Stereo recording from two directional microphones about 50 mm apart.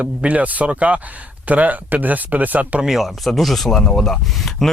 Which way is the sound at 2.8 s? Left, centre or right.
Centre.